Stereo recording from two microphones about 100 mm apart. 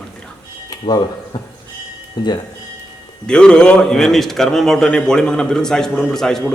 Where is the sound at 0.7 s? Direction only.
45° left (ahead or behind).